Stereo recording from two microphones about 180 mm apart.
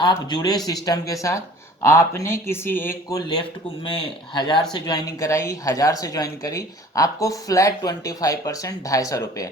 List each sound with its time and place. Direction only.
0.0 s speech: 20° left (ahead or behind)